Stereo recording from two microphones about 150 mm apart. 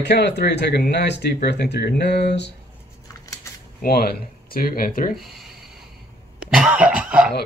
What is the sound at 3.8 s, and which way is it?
Speech, 90° left.